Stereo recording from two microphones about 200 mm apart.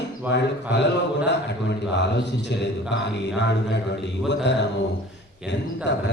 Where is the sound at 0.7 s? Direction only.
60° left (ahead or behind).